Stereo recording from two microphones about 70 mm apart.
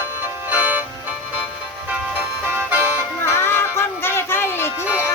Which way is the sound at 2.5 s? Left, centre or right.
Right.